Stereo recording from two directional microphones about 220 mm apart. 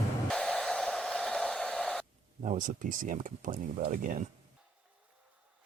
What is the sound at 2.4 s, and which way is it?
Speech, 35° right (ahead or behind).